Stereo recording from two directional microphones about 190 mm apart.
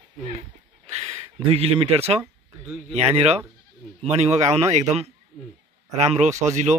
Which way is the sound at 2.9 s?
35° right (ahead or behind).